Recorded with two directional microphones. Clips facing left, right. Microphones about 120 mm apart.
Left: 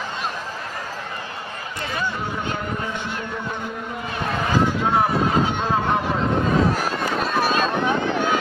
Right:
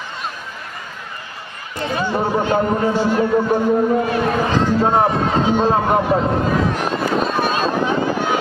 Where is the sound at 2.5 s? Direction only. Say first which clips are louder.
Right 11 dB; 35° right (ahead or behind).